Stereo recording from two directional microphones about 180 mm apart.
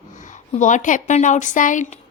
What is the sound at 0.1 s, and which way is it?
A woman's voice, 45° left (ahead or behind).